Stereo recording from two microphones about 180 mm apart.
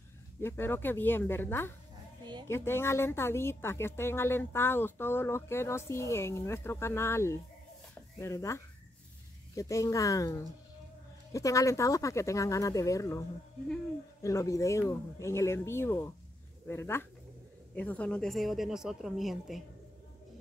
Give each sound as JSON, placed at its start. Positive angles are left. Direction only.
{"t": 0.4, "sound": "speech", "side_deg": 15}
{"t": 14.2, "sound": "speech", "side_deg": 20}